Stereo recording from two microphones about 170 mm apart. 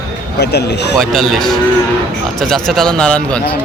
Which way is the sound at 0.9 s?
Centre (ahead or behind).